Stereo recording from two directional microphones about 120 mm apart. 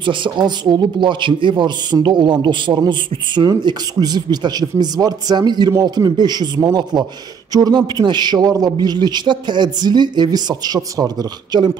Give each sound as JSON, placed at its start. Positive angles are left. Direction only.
{"t": 0.0, "sound": "speech", "side_deg": -40}